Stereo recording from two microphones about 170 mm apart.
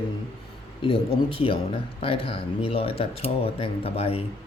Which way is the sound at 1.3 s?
30° left (ahead or behind).